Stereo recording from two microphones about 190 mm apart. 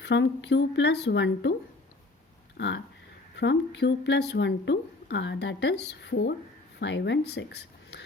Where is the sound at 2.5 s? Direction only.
65° left (ahead or behind).